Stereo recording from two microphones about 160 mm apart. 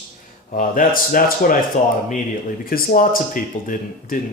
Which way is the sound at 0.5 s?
60° left (ahead or behind).